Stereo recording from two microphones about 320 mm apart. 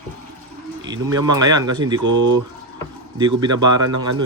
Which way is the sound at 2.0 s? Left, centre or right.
Right.